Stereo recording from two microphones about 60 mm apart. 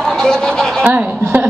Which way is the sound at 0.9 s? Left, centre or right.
Right.